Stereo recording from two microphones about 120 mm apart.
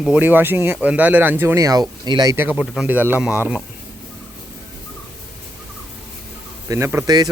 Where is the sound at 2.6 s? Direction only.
5° right (ahead or behind).